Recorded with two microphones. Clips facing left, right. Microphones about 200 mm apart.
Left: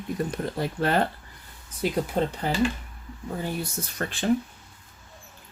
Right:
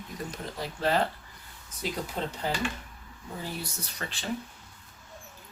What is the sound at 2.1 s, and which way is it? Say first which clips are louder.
Speech: left 9 dB; 60° left (ahead or behind).